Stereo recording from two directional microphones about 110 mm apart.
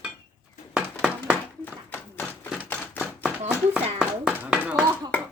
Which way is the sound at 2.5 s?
20° left (ahead or behind).